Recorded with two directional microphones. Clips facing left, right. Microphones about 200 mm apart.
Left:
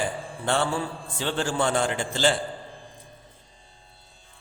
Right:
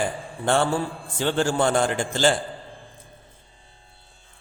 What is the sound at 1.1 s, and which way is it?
A man's voice, 45° right (ahead or behind).